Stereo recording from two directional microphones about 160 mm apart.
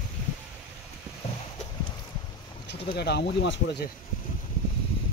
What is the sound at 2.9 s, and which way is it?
Speech, 90° left.